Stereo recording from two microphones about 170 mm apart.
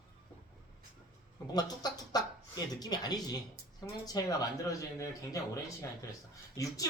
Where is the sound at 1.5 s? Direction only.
25° left (ahead or behind).